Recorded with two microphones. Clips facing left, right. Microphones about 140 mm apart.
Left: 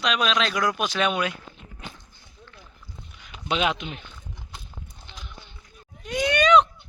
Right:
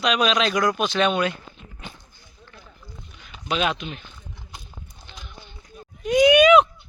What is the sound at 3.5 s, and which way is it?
Speech, 20° left (ahead or behind).